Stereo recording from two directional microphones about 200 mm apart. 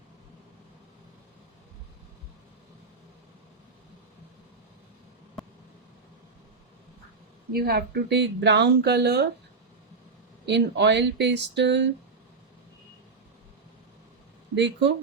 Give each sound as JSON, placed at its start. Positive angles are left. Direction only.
{"t": 5.4, "sound": "vehicle", "side_deg": 0}
{"t": 7.5, "sound": "speech", "side_deg": -50}
{"t": 10.4, "sound": "speech", "side_deg": -60}
{"t": 14.5, "sound": "speech", "side_deg": -60}